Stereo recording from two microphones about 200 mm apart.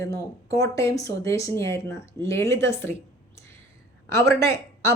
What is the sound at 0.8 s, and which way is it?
Speech, 15° left (ahead or behind).